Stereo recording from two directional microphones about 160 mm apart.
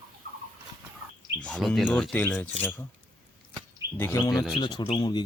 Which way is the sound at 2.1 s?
10° left (ahead or behind).